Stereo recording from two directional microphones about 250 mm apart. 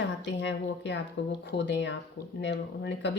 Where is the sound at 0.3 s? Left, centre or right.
Left.